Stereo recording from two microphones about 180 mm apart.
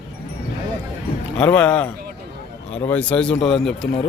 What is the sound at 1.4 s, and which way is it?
Speech, 5° left (ahead or behind).